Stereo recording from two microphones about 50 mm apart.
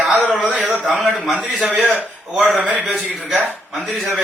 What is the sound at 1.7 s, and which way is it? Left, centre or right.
Speech, right.